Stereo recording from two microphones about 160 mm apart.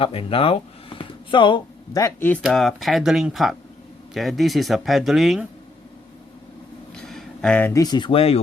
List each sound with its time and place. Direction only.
0.0 s speech: 35° left (ahead or behind)
2.0 s speech: 15° left (ahead or behind)
2.4 s speech: centre (ahead or behind)
6.9 s a sound: 5° left (ahead or behind)
7.7 s speech: 25° left (ahead or behind)